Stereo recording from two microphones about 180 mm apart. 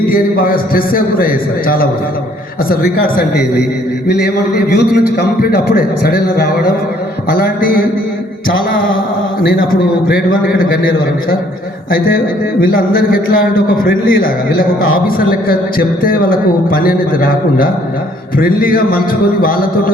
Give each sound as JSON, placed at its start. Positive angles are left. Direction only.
{"t": 0.1, "sound": "a man's voice", "side_deg": 55}
{"t": 10.1, "sound": "speech", "side_deg": 50}
{"t": 11.9, "sound": "speech", "side_deg": 55}